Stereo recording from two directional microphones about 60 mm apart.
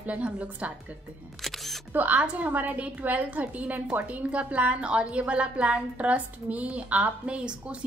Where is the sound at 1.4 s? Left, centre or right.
Centre.